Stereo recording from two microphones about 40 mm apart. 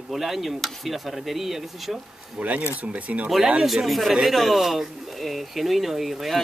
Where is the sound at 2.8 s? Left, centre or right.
Right.